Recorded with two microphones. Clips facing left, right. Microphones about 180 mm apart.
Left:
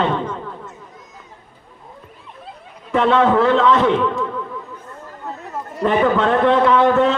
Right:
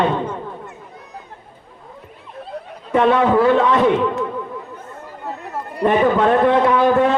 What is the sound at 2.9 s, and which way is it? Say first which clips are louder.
A man's voice: right 1 dB; 20° right (ahead or behind).